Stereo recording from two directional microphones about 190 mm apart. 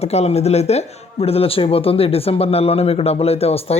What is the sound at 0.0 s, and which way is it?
Speech, 35° left (ahead or behind).